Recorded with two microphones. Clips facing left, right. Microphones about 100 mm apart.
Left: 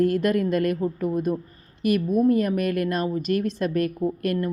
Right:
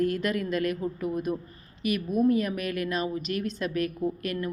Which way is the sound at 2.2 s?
45° left (ahead or behind).